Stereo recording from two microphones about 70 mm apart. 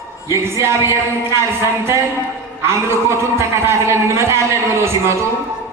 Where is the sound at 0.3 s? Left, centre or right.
Right.